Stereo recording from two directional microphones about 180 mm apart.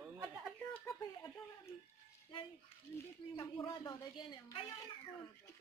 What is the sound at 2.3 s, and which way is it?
Speech, 25° left (ahead or behind).